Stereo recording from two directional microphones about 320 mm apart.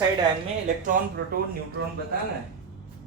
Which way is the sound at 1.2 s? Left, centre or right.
Right.